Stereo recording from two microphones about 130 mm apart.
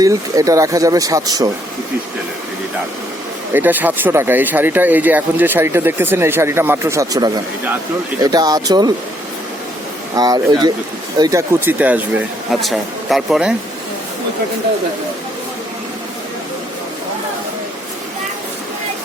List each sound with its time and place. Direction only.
0.0 s speech: 25° right (ahead or behind)
3.5 s speech: 15° right (ahead or behind); by 8.9 s 30° right (ahead or behind)
10.2 s speech: 30° right (ahead or behind); by 11.9 s 15° right (ahead or behind)
12.5 s speech: centre (ahead or behind)